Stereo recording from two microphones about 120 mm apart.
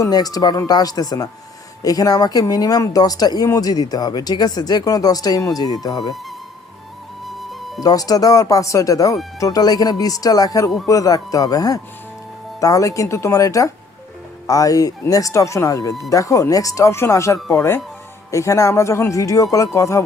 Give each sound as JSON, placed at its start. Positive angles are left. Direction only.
{"t": 0.0, "sound": "speech", "side_deg": 30}
{"t": 7.3, "sound": "music", "side_deg": 0}
{"t": 7.8, "sound": "speech", "side_deg": 30}